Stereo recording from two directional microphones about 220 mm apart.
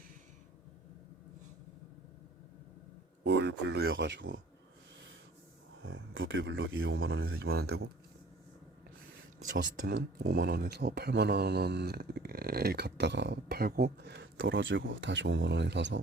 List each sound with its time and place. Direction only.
3.2 s a sound: 50° right (ahead or behind)
3.6 s speech: 50° right (ahead or behind)
5.8 s a man's voice: 60° right (ahead or behind)
7.5 s speech: 45° right (ahead or behind)
9.4 s speech: 55° right (ahead or behind)